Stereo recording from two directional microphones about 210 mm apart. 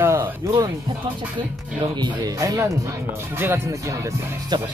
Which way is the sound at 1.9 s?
20° right (ahead or behind).